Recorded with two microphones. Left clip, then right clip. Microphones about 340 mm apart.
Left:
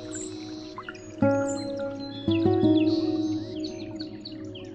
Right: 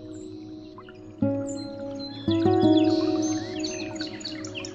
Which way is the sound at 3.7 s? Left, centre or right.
Right.